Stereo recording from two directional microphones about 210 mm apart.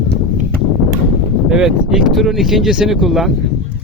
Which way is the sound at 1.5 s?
Centre (ahead or behind).